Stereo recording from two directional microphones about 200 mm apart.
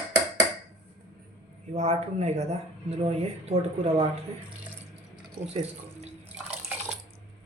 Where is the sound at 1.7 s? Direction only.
35° right (ahead or behind).